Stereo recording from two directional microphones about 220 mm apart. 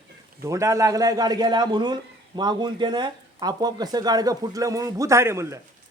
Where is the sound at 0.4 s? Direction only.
15° right (ahead or behind).